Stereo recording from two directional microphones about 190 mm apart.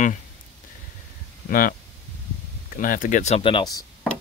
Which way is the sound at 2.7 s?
45° left (ahead or behind).